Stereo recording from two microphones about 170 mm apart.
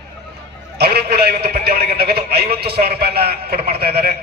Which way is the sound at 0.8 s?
70° right (ahead or behind).